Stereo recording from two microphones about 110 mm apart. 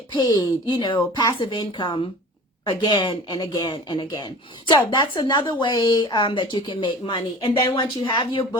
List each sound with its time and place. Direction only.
0.1 s speech: 40° left (ahead or behind)
1.4 s a woman's voice: 50° left (ahead or behind)